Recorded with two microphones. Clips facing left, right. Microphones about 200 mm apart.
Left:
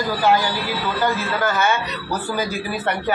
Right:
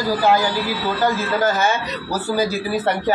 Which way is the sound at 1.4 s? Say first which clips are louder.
Right 1 dB; 40° right (ahead or behind).